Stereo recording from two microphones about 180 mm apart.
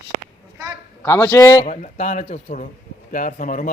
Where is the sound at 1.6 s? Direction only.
40° left (ahead or behind).